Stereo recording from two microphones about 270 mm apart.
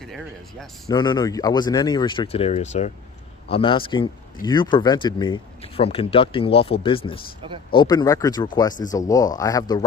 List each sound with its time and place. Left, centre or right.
0.0 s speech: centre
0.8 s speech: centre